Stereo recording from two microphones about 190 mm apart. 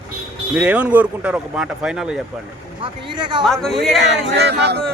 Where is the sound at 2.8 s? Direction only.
25° right (ahead or behind).